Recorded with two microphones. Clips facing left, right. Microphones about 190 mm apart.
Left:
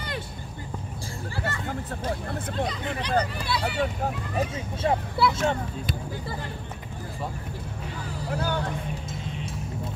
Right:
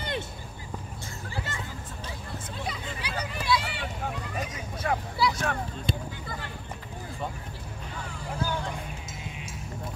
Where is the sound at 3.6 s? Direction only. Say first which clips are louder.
Left 10 dB; 45° left (ahead or behind).